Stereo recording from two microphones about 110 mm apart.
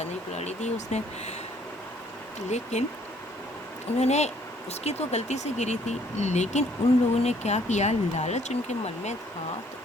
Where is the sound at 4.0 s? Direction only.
90° left.